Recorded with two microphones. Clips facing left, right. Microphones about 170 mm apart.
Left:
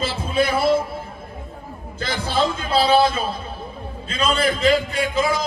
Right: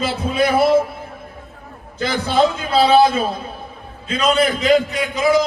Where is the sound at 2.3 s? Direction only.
55° right (ahead or behind).